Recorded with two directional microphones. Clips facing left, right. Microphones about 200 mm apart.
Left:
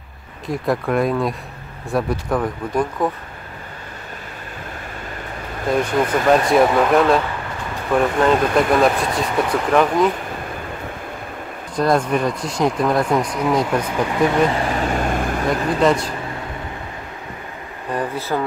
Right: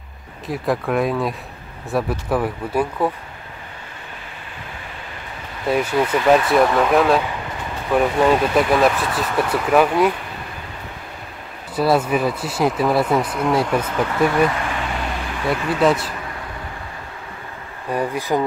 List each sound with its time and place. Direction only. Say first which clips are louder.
0.5 s speech: left 1 dB; centre (ahead or behind)
5.7 s speech: even; 5° right (ahead or behind)
5.9 s speech: right 1 dB; 45° left (ahead or behind)
6.5 s speech: left 1 dB; centre (ahead or behind)
11.7 s speech: even; 5° right (ahead or behind)
13.8 s speech: left 1 dB; 15° left (ahead or behind)
14.5 s vehicle: left 5 dB; 35° left (ahead or behind)
15.8 s speech: even; 5° right (ahead or behind)
17.9 s speech: right 2 dB; 15° right (ahead or behind)